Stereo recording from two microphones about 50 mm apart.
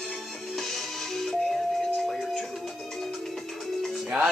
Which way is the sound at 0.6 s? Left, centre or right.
Centre.